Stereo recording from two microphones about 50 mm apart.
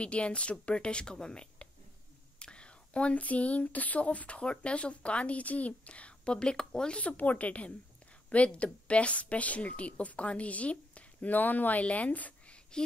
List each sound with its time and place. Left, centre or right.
0.0 s speech: left
7.0 s speech: left